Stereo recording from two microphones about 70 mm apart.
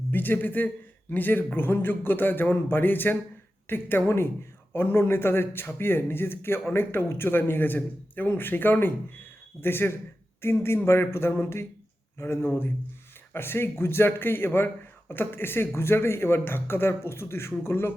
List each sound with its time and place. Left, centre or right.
0.1 s a man's voice: left